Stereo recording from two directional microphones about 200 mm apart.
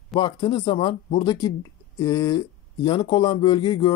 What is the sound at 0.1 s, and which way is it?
Speech, 25° left (ahead or behind).